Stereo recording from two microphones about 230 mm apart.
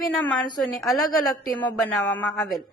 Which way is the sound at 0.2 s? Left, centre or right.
Centre.